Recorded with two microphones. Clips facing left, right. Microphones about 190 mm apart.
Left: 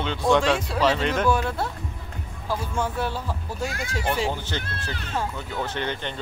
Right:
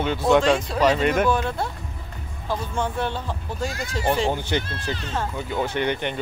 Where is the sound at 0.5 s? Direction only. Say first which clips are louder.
Right 2 dB; 5° left (ahead or behind).